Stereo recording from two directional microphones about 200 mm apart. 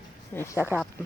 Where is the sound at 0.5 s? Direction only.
10° right (ahead or behind).